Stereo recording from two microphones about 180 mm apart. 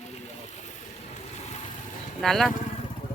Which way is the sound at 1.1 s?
35° left (ahead or behind).